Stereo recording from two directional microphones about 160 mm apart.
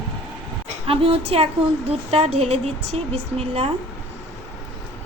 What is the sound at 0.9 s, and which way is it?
A woman's voice, 35° right (ahead or behind).